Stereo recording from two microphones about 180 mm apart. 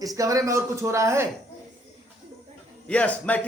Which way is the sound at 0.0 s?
20° right (ahead or behind).